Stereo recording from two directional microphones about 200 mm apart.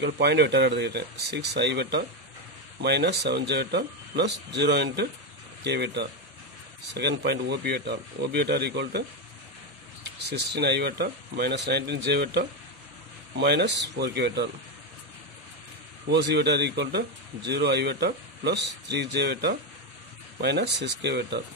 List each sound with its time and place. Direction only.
0.0 s speech: 55° right (ahead or behind)
10.5 s speech: 55° right (ahead or behind)
16.1 s speech: 55° right (ahead or behind)